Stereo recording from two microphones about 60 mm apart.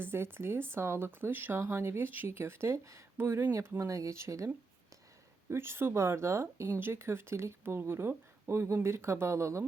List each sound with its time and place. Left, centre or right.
0.0 s speech: right
1.6 s speech: right
3.2 s speech: right
3.8 s speech: right
5.5 s speech: right
6.7 s speech: right